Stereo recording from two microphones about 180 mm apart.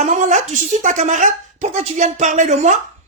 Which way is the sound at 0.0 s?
40° right (ahead or behind).